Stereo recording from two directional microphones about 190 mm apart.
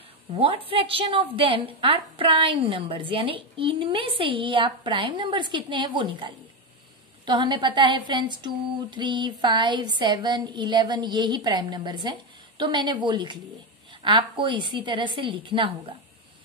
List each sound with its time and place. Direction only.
0.3 s a woman's voice: 30° right (ahead or behind)